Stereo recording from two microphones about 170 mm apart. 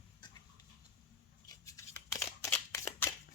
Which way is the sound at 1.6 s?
20° left (ahead or behind).